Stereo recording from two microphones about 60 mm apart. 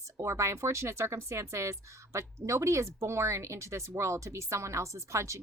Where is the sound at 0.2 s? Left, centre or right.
Right.